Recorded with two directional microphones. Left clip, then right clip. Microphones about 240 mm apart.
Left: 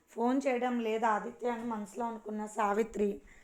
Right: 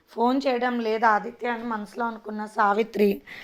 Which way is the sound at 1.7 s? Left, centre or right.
Right.